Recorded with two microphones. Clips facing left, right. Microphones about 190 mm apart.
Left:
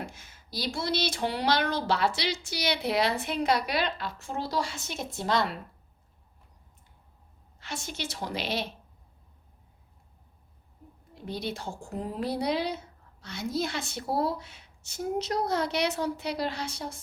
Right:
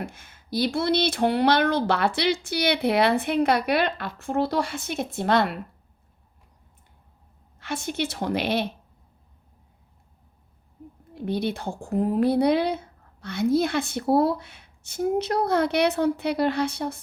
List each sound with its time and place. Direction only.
0.0 s speech: 55° right (ahead or behind)
7.6 s speech: 55° right (ahead or behind)
11.1 s speech: 60° right (ahead or behind)